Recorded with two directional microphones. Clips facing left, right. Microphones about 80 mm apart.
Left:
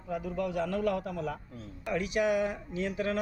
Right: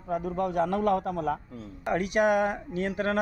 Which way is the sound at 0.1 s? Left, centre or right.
Right.